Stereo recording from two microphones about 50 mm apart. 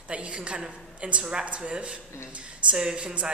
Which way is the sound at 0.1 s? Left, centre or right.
Right.